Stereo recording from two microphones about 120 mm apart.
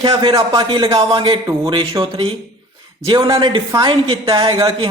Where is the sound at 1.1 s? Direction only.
45° right (ahead or behind).